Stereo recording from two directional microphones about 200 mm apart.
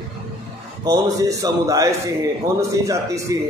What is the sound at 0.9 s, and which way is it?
A man's voice, 15° right (ahead or behind).